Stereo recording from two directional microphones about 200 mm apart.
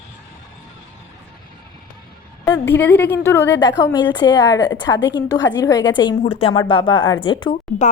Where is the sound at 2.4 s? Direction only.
15° left (ahead or behind).